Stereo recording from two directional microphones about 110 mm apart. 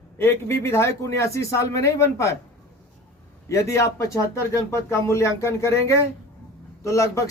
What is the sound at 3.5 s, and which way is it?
Speech, 30° left (ahead or behind).